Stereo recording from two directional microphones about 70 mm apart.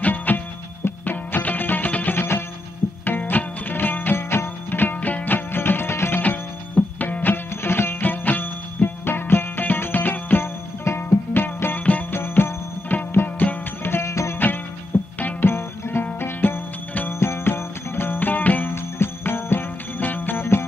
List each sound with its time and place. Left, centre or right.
0.0 s music: left
13.9 s music: left
15.1 s music: left